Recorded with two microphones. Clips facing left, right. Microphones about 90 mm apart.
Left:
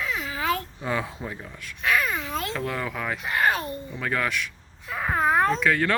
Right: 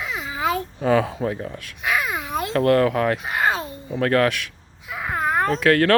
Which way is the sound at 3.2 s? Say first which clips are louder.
Right 1 dB; 20° right (ahead or behind).